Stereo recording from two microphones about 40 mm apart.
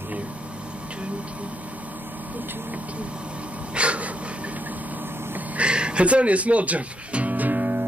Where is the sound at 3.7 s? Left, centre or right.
Right.